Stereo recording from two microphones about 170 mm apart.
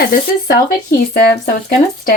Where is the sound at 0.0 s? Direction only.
55° left (ahead or behind).